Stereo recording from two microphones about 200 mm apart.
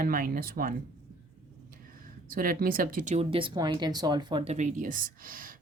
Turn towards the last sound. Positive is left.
turn(degrees=-45)  # may be behind; listen again after turning